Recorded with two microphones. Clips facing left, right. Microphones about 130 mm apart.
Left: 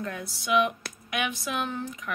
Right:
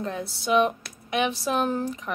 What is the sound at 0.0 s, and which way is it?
A woman's voice, 30° right (ahead or behind).